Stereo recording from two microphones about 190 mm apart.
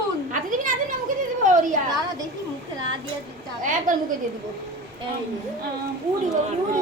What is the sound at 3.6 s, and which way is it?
Speech, 45° right (ahead or behind).